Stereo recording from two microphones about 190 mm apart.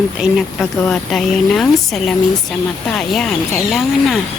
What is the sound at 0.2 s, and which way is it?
A woman's voice, centre (ahead or behind).